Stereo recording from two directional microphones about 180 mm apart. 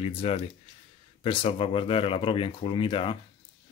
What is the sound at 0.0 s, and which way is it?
Speech, 30° left (ahead or behind).